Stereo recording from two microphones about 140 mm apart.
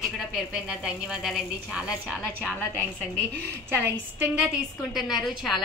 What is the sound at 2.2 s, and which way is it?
Speech, 10° left (ahead or behind).